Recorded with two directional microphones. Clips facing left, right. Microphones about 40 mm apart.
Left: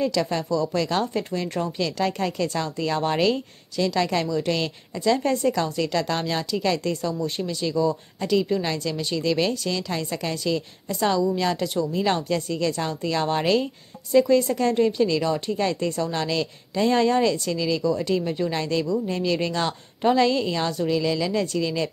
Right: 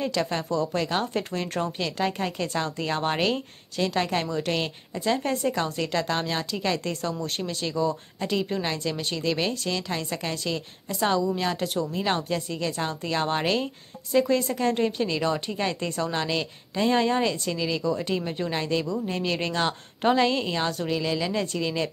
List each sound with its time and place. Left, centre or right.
0.0 s speech: right
1.0 s speech: right
3.7 s speech: right
6.9 s speech: right
10.3 s speech: right
12.0 s speech: right
20.5 s speech: centre